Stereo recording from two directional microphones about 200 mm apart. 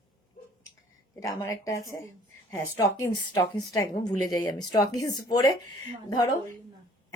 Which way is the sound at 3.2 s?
15° left (ahead or behind).